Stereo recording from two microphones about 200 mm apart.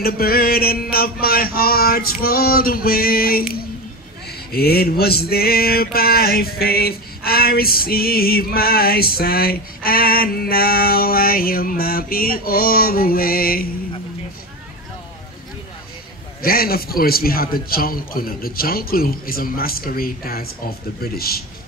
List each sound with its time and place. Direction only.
0.0 s male singing: 50° left (ahead or behind)
16.4 s male singing: 50° left (ahead or behind)